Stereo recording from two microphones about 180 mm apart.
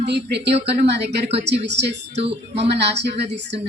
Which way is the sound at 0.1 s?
70° right (ahead or behind).